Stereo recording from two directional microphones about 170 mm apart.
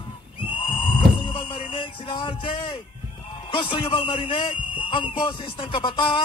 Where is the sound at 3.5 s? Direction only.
30° left (ahead or behind).